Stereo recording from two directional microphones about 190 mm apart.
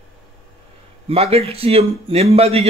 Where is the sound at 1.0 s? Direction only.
30° right (ahead or behind).